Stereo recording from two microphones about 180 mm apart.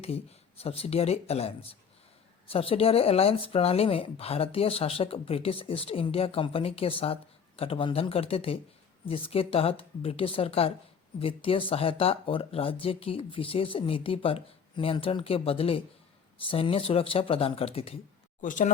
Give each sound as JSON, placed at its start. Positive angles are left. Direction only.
{"t": 0.0, "sound": "speech", "side_deg": 35}
{"t": 18.4, "sound": "speech", "side_deg": 45}